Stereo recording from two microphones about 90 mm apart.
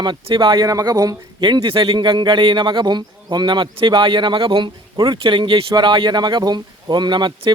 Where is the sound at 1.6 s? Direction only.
70° right (ahead or behind); by 5.2 s 55° right (ahead or behind).